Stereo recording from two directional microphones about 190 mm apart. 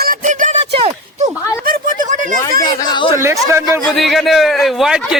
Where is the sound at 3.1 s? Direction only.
15° right (ahead or behind).